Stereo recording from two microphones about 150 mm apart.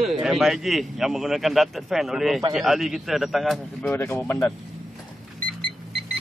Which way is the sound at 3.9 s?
10° left (ahead or behind).